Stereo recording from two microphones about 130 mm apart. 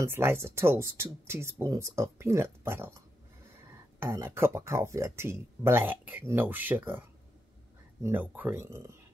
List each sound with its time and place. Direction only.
0.0 s speech: 20° right (ahead or behind)
4.0 s speech: 20° right (ahead or behind)